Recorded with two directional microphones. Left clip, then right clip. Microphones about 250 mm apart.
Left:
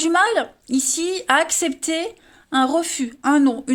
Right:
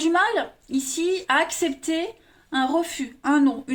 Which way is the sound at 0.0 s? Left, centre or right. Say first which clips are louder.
Left 3 dB; left.